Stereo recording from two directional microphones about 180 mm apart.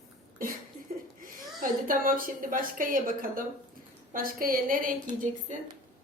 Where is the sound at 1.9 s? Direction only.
50° right (ahead or behind).